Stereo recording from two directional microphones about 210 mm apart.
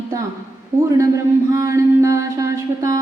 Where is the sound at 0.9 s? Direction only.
15° right (ahead or behind).